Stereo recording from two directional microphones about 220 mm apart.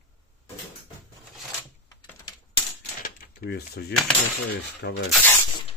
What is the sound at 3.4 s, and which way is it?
Speech, 45° left (ahead or behind).